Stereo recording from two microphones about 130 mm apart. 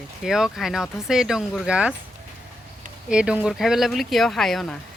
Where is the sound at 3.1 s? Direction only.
10° right (ahead or behind).